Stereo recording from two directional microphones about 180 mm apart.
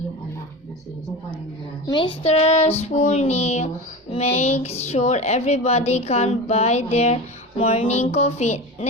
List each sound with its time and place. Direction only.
1.9 s speech: 25° left (ahead or behind)